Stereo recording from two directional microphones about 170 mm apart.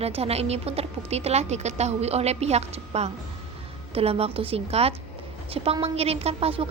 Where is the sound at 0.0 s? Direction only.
35° right (ahead or behind).